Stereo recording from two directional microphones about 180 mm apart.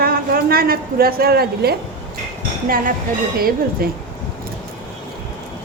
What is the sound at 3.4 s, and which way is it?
Speech, 55° right (ahead or behind).